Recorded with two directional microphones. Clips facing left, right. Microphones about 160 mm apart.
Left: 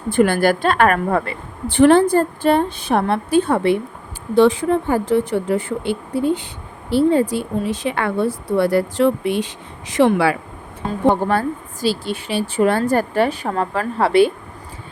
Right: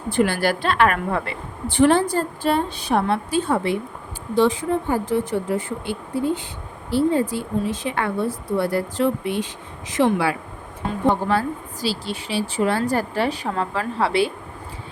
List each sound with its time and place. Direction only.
0.1 s a woman's voice: 50° left (ahead or behind); by 10.3 s 75° left (ahead or behind)
11.1 s a woman's voice: 50° left (ahead or behind)